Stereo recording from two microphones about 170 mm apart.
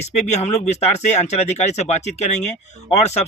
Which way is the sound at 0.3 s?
40° left (ahead or behind).